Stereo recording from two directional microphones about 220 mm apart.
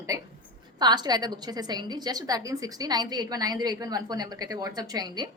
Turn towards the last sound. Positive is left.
turn(degrees=-20)  # may be behind; listen again after turning